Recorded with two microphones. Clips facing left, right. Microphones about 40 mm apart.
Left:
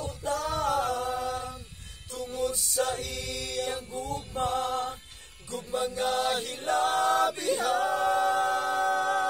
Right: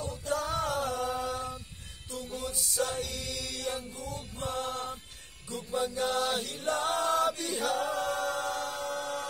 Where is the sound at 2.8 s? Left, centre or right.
Centre.